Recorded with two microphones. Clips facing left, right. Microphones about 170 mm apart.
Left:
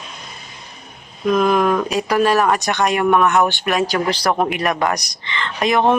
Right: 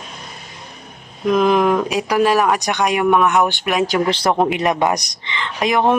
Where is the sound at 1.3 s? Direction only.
15° right (ahead or behind).